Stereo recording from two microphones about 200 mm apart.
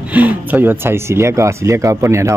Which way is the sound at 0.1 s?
10° right (ahead or behind).